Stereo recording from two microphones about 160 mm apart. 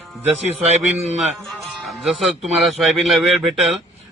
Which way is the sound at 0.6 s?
45° right (ahead or behind).